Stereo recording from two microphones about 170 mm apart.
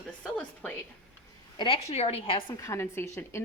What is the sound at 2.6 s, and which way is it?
Speech, 15° left (ahead or behind).